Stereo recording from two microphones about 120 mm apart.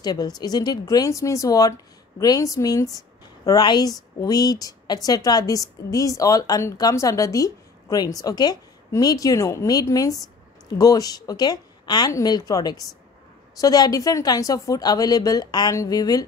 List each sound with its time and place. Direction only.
0.0 s a woman's voice: 35° left (ahead or behind)